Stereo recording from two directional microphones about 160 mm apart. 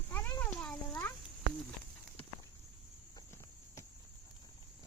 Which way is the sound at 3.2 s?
20° left (ahead or behind).